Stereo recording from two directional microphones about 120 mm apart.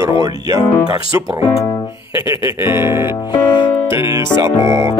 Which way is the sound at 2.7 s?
20° right (ahead or behind).